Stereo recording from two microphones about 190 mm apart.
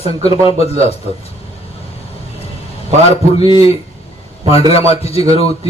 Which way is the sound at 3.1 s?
25° left (ahead or behind).